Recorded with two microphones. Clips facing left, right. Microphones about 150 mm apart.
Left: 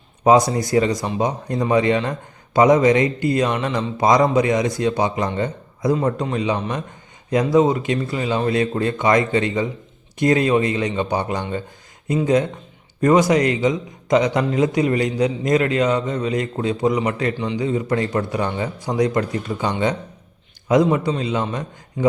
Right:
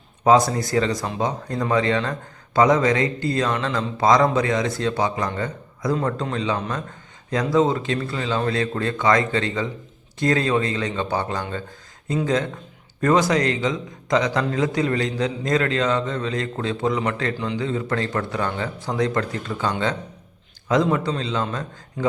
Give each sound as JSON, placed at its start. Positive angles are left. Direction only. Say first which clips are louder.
{"t": 0.3, "sound": "a man's voice", "louder": "left 2 dB", "side_deg": 20}
{"t": 17.3, "sound": "a man's voice", "louder": "left 2 dB", "side_deg": 0}
{"t": 17.6, "sound": "a man's voice", "louder": "left 5 dB", "side_deg": 15}
{"t": 21.1, "sound": "a man's voice", "louder": "left 3 dB", "side_deg": 15}